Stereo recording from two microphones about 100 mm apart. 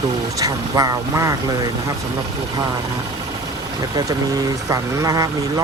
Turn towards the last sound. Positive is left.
turn(degrees=-35)  # may be behind; listen again after turning